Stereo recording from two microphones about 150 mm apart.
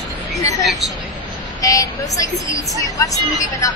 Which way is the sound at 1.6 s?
25° left (ahead or behind).